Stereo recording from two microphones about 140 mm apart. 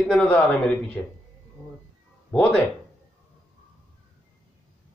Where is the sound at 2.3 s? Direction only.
5° left (ahead or behind).